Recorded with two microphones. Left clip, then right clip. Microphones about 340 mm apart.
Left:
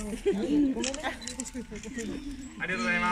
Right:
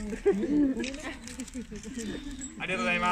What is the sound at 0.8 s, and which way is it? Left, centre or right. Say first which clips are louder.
Speech: left 4 dB; left.